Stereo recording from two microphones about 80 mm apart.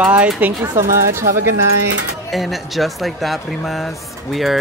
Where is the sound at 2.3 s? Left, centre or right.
Centre.